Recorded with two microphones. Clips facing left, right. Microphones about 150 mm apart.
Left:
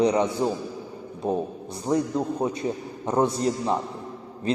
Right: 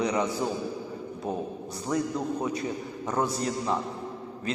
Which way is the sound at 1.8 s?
30° left (ahead or behind).